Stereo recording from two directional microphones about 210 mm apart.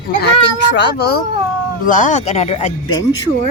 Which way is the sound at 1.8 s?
40° left (ahead or behind).